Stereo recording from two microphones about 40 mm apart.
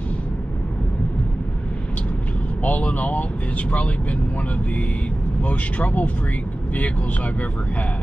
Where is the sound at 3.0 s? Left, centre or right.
Left.